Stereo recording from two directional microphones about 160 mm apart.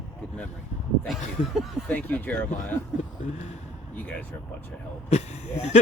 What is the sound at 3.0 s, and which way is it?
Speech, 45° left (ahead or behind).